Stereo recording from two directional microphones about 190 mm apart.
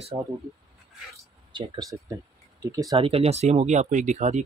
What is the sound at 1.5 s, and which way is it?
Speech, 25° right (ahead or behind).